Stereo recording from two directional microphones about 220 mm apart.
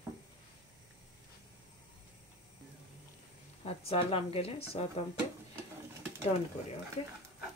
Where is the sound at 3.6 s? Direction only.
25° left (ahead or behind).